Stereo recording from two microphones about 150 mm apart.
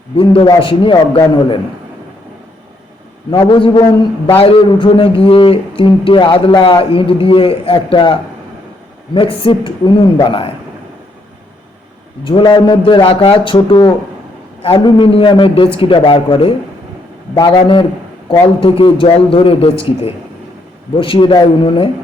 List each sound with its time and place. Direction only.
0.2 s a man's voice: 35° left (ahead or behind)
3.2 s a man's voice: 30° left (ahead or behind)
12.2 s a man's voice: 35° left (ahead or behind)